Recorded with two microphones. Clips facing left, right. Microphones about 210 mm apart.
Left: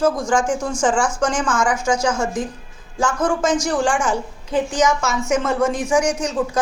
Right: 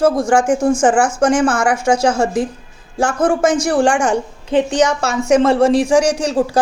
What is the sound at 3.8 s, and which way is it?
Speech, 70° right (ahead or behind).